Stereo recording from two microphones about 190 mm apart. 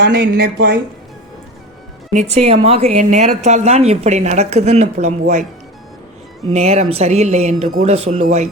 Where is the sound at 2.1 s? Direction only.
35° right (ahead or behind).